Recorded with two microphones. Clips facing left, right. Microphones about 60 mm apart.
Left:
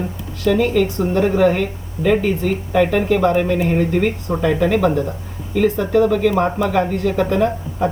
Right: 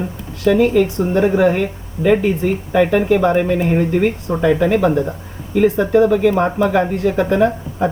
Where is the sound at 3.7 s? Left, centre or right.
Centre.